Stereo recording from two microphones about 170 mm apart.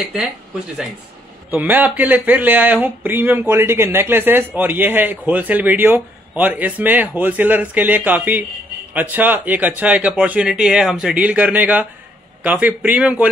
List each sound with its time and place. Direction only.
0.0 s speech: centre (ahead or behind)
1.5 s a man's voice: 10° right (ahead or behind)